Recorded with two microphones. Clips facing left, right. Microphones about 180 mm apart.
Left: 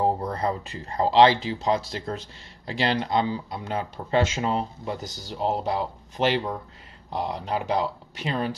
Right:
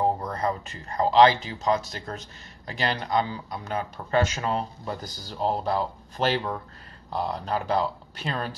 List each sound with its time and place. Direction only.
0.0 s speech: 30° left (ahead or behind)